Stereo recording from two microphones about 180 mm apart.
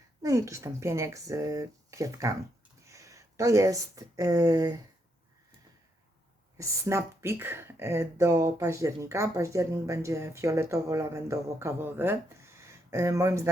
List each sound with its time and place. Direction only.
0.2 s speech: 20° right (ahead or behind)
6.6 s speech: 15° right (ahead or behind)